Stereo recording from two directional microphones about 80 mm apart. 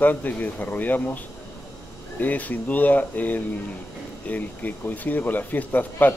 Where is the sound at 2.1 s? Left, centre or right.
Centre.